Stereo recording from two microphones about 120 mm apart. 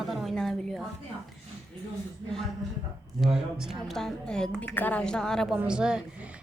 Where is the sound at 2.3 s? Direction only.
Centre (ahead or behind).